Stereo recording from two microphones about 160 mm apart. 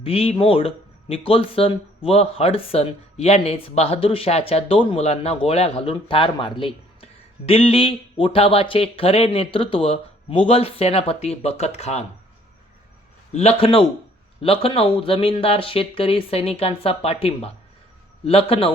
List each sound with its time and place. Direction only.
0.0 s speech: 35° left (ahead or behind)
13.3 s speech: 40° left (ahead or behind)